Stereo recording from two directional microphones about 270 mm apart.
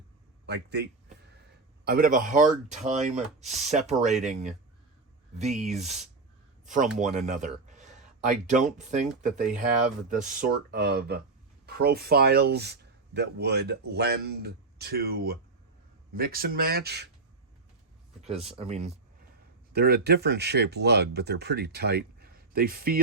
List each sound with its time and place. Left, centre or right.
0.4 s a man's voice: right
18.2 s speech: right
19.7 s speech: right